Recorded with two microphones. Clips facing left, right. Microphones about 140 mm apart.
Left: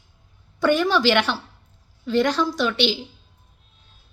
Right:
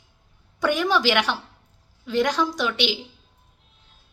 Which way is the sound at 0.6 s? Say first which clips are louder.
Left 3 dB; 15° right (ahead or behind).